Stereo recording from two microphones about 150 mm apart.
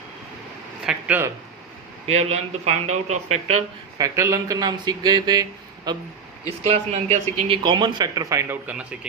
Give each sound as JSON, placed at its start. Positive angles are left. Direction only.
{"t": 0.9, "sound": "speech", "side_deg": -10}
{"t": 2.0, "sound": "speech", "side_deg": -45}
{"t": 3.9, "sound": "speech", "side_deg": -20}
{"t": 6.7, "sound": "speech", "side_deg": -50}
{"t": 7.5, "sound": "speech", "side_deg": -30}